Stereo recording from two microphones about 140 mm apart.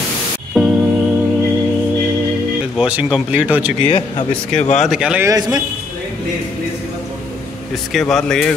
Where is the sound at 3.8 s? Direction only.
35° left (ahead or behind).